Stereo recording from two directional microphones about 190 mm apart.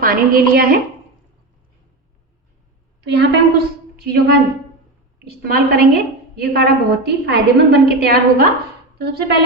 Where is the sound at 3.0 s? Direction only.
60° right (ahead or behind).